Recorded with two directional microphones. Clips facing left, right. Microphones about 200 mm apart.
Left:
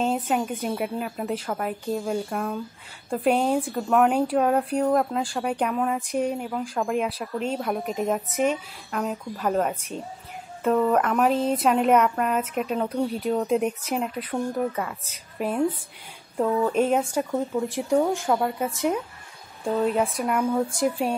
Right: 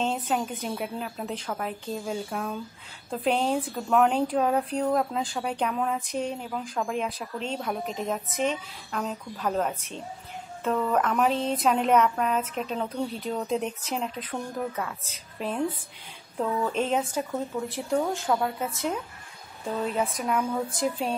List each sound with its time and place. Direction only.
0.0 s a woman's voice: 5° left (ahead or behind)
20.8 s speech: 10° left (ahead or behind)